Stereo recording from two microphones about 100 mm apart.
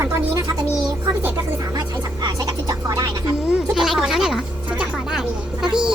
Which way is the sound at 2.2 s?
40° right (ahead or behind).